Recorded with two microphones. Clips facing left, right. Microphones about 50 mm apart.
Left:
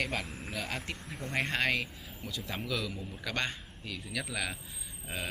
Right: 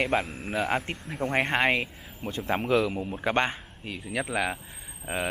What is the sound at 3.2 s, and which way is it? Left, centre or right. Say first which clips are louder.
Speech: right 9 dB; right.